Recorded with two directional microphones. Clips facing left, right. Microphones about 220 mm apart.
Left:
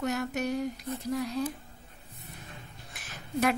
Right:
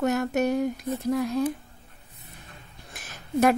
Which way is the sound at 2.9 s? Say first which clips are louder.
Right 6 dB; 45° right (ahead or behind).